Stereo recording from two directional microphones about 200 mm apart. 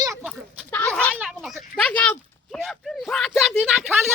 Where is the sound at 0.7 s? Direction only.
10° left (ahead or behind).